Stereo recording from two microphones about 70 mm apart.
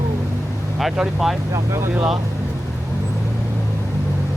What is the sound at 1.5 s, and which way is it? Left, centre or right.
Speech, right.